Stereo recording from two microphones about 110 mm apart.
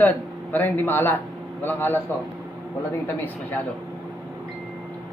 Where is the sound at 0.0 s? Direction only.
15° left (ahead or behind).